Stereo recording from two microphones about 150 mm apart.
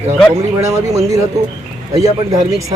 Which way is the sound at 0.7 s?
20° right (ahead or behind).